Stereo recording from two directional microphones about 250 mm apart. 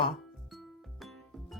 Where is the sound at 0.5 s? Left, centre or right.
Centre.